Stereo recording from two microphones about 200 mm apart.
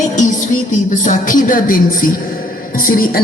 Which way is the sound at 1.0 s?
40° left (ahead or behind).